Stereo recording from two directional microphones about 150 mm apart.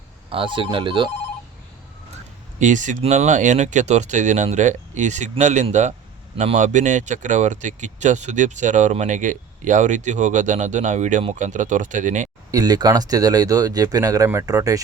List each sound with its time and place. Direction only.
0.3 s speech: 35° right (ahead or behind)
2.6 s speech: 55° right (ahead or behind)
12.5 s speech: 25° right (ahead or behind)